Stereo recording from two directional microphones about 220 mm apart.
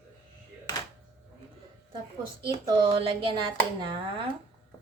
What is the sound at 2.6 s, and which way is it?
Speech, 20° right (ahead or behind).